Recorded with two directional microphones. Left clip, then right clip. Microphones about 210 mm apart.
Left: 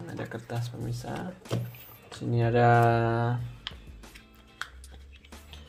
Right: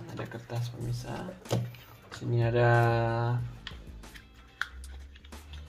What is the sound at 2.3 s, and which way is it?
Speech, 45° left (ahead or behind).